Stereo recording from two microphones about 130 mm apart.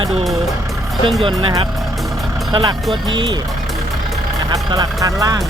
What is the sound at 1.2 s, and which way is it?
Speech, 40° right (ahead or behind).